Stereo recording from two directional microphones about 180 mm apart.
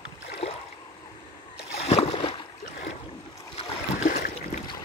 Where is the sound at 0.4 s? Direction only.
35° left (ahead or behind).